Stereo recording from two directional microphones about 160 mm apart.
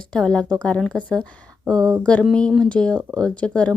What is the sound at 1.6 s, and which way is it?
Speech, 25° right (ahead or behind).